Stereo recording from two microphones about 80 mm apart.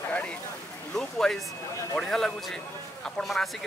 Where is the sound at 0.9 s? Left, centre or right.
Centre.